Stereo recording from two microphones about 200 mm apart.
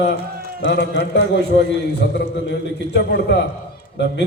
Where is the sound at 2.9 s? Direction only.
55° left (ahead or behind).